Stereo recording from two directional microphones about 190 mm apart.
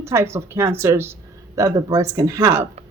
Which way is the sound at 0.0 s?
15° right (ahead or behind).